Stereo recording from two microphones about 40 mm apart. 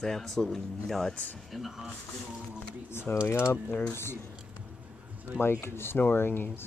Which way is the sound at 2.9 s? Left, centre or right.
Left.